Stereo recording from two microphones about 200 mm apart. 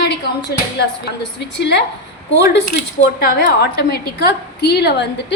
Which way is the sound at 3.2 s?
50° left (ahead or behind).